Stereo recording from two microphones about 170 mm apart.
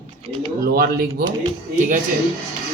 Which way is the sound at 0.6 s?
65° right (ahead or behind).